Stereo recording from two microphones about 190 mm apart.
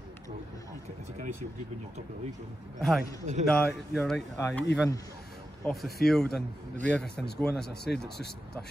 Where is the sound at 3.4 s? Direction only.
5° left (ahead or behind).